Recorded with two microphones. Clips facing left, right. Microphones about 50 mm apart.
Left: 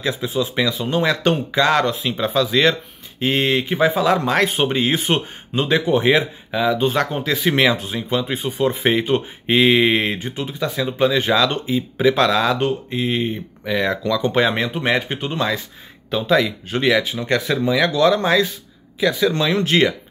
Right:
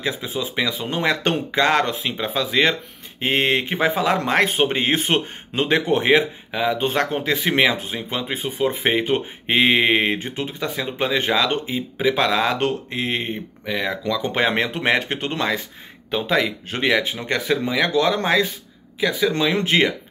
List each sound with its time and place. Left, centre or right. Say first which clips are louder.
0.0 s speech: left 4 dB; right
6.8 s speech: left 2 dB; right
12.0 s speech: left 3 dB; centre
12.3 s speech: left 2 dB; right
12.5 s speech: left 2 dB; right
13.7 s speech: left 4 dB; centre
14.0 s speech: left 2 dB; right
14.8 s speech: even; right
16.1 s speech: left 3 dB; right
18.9 s speech: left 2 dB; right